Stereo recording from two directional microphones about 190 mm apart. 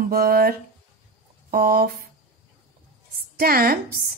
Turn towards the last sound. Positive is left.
turn(degrees=-55)  # may be behind; listen again after turning